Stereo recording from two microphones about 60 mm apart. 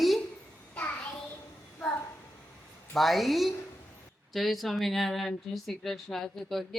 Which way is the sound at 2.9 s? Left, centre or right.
Centre.